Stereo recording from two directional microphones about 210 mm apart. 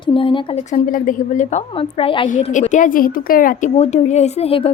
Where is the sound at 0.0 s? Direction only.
25° left (ahead or behind).